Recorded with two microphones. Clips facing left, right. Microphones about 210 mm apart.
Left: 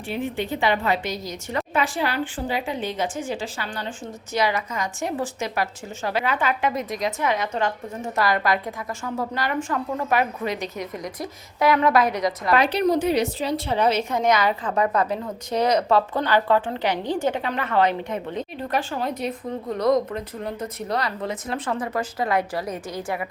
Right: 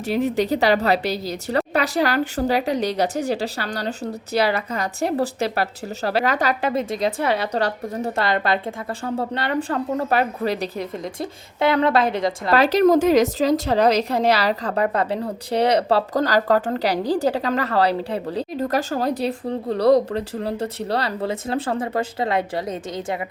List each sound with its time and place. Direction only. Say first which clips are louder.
0.0 s speech: right 7 dB; 40° right (ahead or behind)
12.9 s a woman's voice: right 5 dB; 90° right
13.5 s speech: right 4 dB; 40° right (ahead or behind)